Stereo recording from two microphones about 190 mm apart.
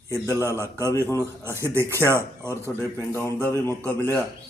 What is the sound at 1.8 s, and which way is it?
Speech, 15° right (ahead or behind).